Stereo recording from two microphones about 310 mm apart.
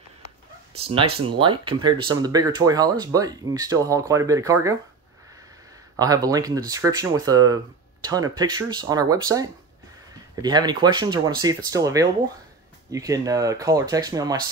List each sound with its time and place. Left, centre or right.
0.7 s speech: centre
5.9 s speech: centre